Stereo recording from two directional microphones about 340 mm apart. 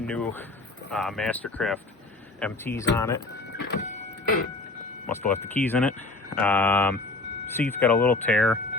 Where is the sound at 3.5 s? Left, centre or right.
Left.